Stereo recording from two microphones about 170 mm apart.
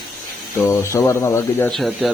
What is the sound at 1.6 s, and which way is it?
Speech, centre (ahead or behind).